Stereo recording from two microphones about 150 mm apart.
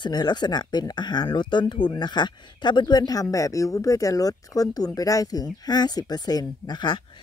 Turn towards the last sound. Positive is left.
turn(degrees=30)  # may be behind; listen again after turning